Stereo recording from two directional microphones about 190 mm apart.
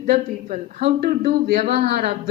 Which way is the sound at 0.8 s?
60° right (ahead or behind).